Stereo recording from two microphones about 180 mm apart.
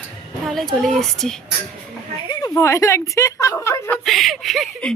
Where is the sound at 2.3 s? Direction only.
20° left (ahead or behind).